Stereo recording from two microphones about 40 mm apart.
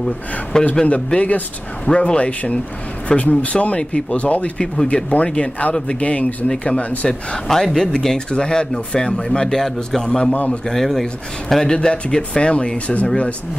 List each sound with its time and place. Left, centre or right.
0.0 s speech: centre
0.8 s speech: left
7.1 s speech: centre
10.3 s speech: left
10.7 s speech: centre
11.6 s speech: centre